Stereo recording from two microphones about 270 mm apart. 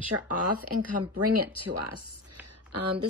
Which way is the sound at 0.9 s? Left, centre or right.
Right.